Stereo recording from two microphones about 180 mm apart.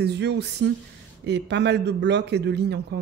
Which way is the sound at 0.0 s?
70° right (ahead or behind).